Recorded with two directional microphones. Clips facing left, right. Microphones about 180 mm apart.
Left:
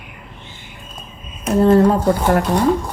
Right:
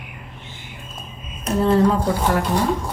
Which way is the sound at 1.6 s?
45° left (ahead or behind).